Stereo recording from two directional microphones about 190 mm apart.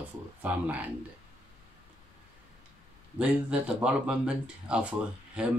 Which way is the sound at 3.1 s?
5° right (ahead or behind).